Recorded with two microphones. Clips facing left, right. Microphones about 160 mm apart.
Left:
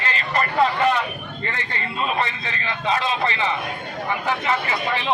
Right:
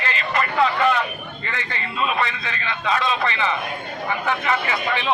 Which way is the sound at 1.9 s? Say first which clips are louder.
Right 1 dB; 35° left (ahead or behind).